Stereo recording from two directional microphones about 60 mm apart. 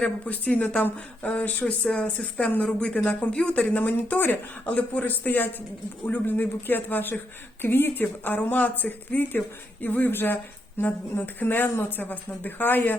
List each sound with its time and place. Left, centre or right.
0.0 s speech: left